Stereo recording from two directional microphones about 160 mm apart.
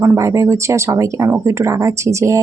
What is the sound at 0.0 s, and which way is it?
Speech, 20° right (ahead or behind).